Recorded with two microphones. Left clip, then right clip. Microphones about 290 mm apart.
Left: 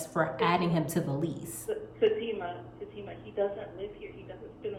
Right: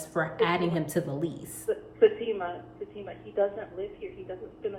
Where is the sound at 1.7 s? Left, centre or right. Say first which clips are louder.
Right 4 dB; centre.